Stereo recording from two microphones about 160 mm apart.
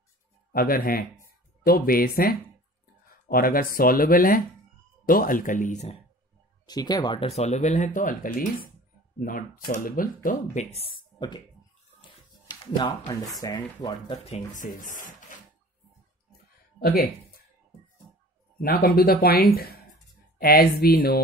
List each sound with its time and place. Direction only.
0.5 s speech: 65° left (ahead or behind); by 5.9 s 45° left (ahead or behind)
6.6 s speech: 25° left (ahead or behind); by 10.7 s 50° left (ahead or behind)
10.8 s speech: 30° left (ahead or behind)
12.7 s speech: 25° left (ahead or behind)
13.8 s speech: 35° left (ahead or behind); by 15.2 s 55° left (ahead or behind)
16.8 s speech: 65° left (ahead or behind)
18.6 s speech: 70° left (ahead or behind)